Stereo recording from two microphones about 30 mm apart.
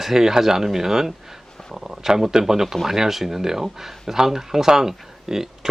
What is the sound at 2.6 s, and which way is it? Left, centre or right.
Speech, centre.